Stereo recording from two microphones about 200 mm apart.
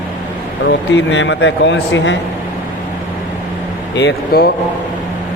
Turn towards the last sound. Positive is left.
turn(degrees=55)  # may be behind; listen again after turning